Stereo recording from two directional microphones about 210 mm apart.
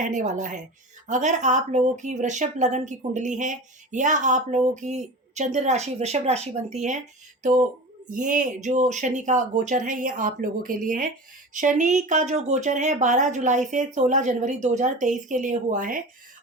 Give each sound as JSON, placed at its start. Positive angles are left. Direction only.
{"t": 0.0, "sound": "speech", "side_deg": -35}
{"t": 8.1, "sound": "speech", "side_deg": -40}